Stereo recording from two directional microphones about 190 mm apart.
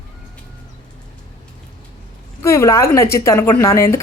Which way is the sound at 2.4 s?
15° left (ahead or behind).